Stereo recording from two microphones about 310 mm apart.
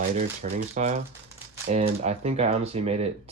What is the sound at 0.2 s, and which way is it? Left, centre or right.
Speech, right.